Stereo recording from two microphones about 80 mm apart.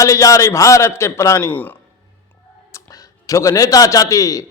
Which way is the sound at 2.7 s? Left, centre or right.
Left.